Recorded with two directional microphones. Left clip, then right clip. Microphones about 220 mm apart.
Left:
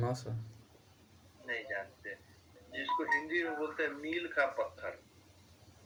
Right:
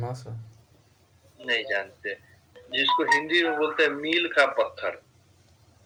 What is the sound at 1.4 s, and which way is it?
A man's voice, 45° right (ahead or behind).